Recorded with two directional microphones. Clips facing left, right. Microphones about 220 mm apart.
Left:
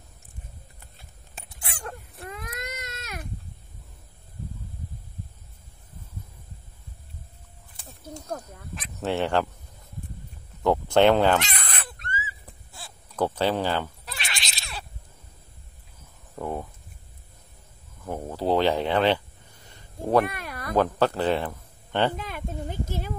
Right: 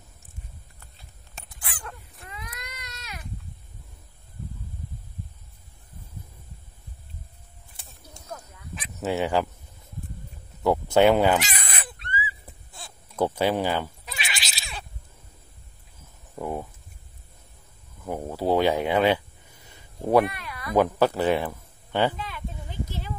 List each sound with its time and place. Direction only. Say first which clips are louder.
1.5 s a sound: left 4 dB; 25° left (ahead or behind)
2.0 s baby cry: left 5 dB; 45° left (ahead or behind)
8.7 s honk: even; centre (ahead or behind)
9.1 s speech: even; 10° right (ahead or behind)
10.6 s speech: even; 10° right (ahead or behind)
12.0 s crow: right 5 dB; 45° left (ahead or behind)
13.1 s speech: right 1 dB; 10° right (ahead or behind)
14.0 s cat: right 1 dB; centre (ahead or behind)
16.3 s a sound: even; 5° right (ahead or behind)
18.0 s speech: right 1 dB; 10° right (ahead or behind)
19.7 s quack: right 2 dB; 10° right (ahead or behind)
20.2 s cat: left 1 dB; 45° left (ahead or behind)
20.7 s speech: right 2 dB; 10° right (ahead or behind)
22.1 s a sound: left 3 dB; 45° left (ahead or behind)